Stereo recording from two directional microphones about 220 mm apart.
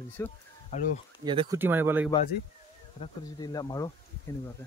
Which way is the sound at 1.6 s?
10° right (ahead or behind).